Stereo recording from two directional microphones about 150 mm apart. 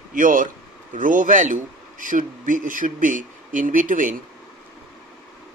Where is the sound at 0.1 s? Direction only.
65° right (ahead or behind).